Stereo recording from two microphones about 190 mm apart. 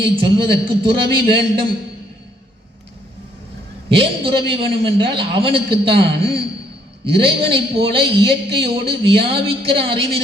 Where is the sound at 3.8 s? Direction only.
30° right (ahead or behind).